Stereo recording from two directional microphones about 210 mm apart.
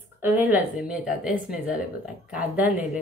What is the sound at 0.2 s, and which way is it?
A woman's voice, 10° right (ahead or behind).